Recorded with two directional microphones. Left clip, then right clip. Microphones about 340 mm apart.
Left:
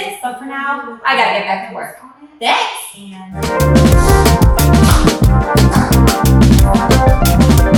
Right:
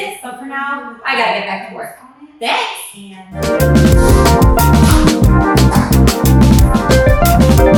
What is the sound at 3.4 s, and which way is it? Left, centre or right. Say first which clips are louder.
Music: even; centre.